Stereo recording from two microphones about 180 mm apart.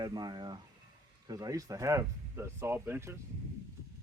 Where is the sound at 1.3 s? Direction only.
20° right (ahead or behind).